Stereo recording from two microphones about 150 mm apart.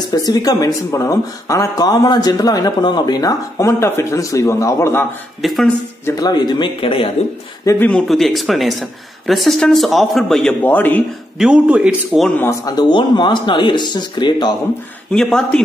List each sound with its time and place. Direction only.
0.0 s speech: 25° left (ahead or behind)
5.4 s speech: centre (ahead or behind)
6.0 s speech: 25° left (ahead or behind)
7.9 s speech: centre (ahead or behind)
11.3 s speech: 5° right (ahead or behind)
12.4 s speech: 20° left (ahead or behind)
15.1 s speech: 5° left (ahead or behind)